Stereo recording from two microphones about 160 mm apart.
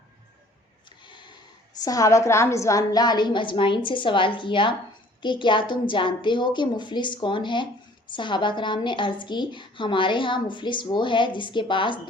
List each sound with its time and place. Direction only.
1.0 s snort: 30° left (ahead or behind)
1.8 s a woman's voice: 20° left (ahead or behind)